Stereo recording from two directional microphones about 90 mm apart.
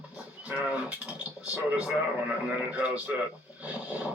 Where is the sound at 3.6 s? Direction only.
15° right (ahead or behind).